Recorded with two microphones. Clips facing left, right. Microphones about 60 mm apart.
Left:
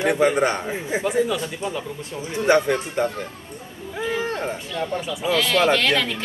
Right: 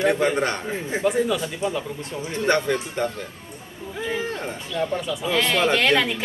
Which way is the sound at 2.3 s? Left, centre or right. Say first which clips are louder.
Left 3 dB; centre.